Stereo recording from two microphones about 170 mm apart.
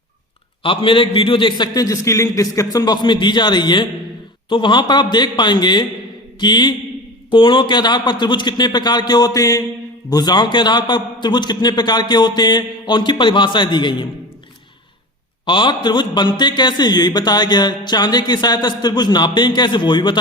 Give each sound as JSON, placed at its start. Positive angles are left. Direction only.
{"t": 0.6, "sound": "a man's voice", "side_deg": 30}
{"t": 15.4, "sound": "a man's voice", "side_deg": 30}